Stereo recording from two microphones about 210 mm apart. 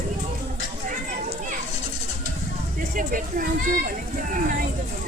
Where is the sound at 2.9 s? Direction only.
40° right (ahead or behind).